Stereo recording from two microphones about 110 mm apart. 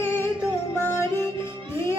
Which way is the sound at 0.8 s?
20° left (ahead or behind).